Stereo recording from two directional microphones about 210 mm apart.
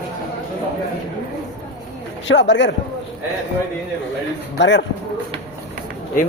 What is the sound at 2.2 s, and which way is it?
Speech, 60° left (ahead or behind).